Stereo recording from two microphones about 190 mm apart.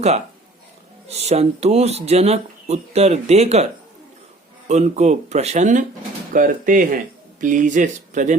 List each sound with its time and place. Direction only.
1.0 s speech: 35° right (ahead or behind)
4.7 s speech: 35° right (ahead or behind)